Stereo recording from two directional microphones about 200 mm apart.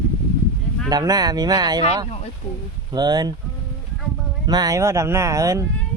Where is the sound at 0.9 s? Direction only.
20° right (ahead or behind).